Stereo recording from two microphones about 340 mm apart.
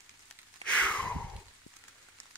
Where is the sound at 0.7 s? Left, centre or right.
Centre.